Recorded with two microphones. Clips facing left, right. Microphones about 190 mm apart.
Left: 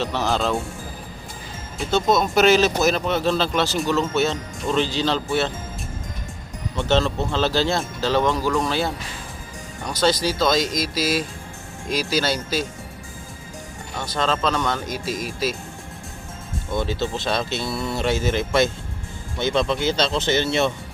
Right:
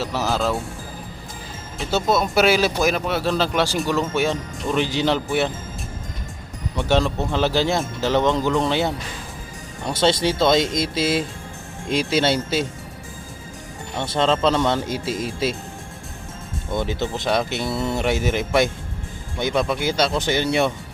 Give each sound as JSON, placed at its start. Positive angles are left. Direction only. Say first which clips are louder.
{"t": 0.0, "sound": "speech", "louder": "even", "side_deg": -5}
{"t": 1.9, "sound": "speech", "louder": "left 1 dB", "side_deg": -10}
{"t": 6.7, "sound": "speech", "louder": "even", "side_deg": -15}
{"t": 9.9, "sound": "speech", "louder": "right 2 dB", "side_deg": -25}
{"t": 14.0, "sound": "speech", "louder": "right 4 dB", "side_deg": -25}
{"t": 16.7, "sound": "speech", "louder": "even", "side_deg": -20}